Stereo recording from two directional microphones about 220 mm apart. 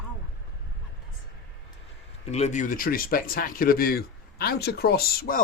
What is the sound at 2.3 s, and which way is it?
Speech, 30° left (ahead or behind).